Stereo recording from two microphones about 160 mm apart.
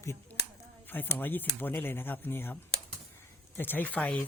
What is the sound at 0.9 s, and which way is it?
Speech, 10° left (ahead or behind).